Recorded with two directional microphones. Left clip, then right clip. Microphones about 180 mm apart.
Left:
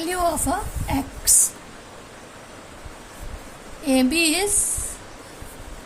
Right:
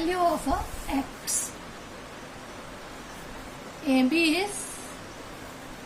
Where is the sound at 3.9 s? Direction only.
60° left (ahead or behind).